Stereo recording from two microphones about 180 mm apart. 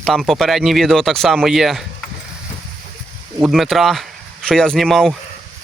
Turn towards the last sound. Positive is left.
turn(degrees=0)  # may be behind; listen again after turning